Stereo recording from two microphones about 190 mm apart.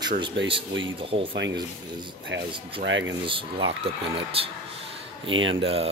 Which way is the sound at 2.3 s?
70° right (ahead or behind).